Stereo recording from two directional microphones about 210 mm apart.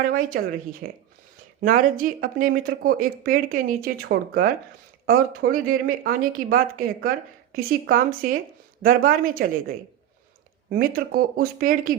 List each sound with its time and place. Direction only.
0.1 s speech: 40° right (ahead or behind)